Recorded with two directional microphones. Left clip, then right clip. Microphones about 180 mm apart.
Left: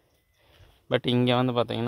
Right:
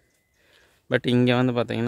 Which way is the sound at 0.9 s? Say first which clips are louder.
Right 2 dB; 40° right (ahead or behind).